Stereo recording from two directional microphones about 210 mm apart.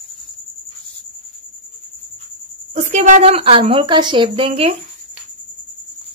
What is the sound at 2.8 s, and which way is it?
A woman's voice, 35° right (ahead or behind).